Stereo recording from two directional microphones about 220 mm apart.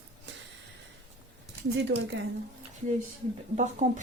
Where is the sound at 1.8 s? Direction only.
50° right (ahead or behind).